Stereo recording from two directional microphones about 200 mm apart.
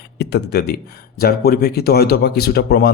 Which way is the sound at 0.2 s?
55° left (ahead or behind).